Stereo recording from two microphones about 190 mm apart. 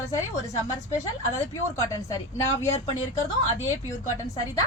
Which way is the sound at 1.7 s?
15° left (ahead or behind).